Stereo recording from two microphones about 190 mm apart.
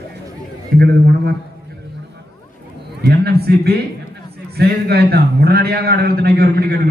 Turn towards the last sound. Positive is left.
turn(degrees=-55)  # may be behind; listen again after turning